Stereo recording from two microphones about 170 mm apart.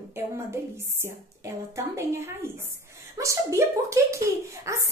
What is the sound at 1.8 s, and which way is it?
Speech, 15° right (ahead or behind).